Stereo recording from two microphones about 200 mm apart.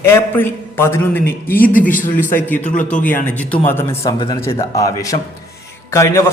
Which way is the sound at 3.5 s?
10° left (ahead or behind).